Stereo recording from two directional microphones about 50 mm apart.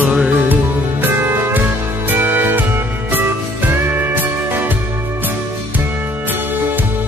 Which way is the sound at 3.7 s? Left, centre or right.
Right.